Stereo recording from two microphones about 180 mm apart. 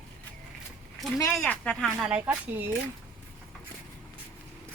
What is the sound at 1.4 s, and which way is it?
Speech, 5° left (ahead or behind).